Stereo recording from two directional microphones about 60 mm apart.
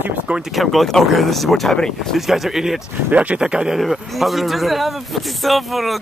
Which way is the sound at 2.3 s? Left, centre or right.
Centre.